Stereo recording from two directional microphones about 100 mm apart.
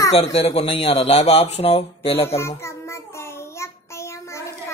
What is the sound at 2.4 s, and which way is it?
Child singing, 30° left (ahead or behind).